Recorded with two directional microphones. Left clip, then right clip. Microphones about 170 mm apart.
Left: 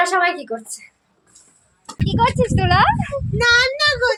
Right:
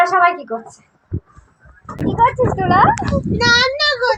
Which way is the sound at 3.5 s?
30° left (ahead or behind).